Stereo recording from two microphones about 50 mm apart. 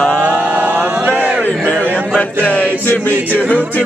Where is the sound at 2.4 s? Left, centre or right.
Left.